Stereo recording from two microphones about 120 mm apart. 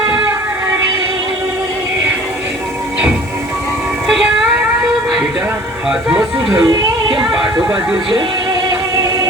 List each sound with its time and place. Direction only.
4.0 s music: 5° right (ahead or behind)
5.9 s speech: 10° right (ahead or behind)